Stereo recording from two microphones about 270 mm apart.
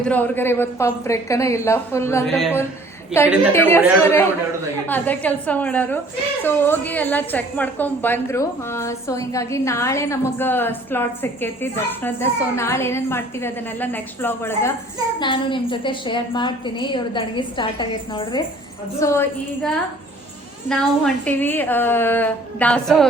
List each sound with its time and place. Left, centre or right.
0.0 s a woman's voice: centre
4.9 s a woman's voice: centre